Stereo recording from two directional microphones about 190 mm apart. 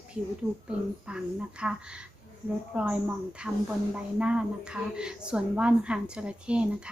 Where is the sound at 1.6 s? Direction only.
5° right (ahead or behind).